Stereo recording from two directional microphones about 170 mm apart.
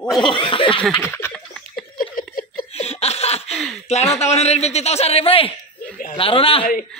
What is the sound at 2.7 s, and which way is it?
Laughter, 35° left (ahead or behind).